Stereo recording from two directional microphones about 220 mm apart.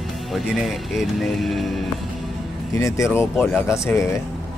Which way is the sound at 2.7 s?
15° left (ahead or behind).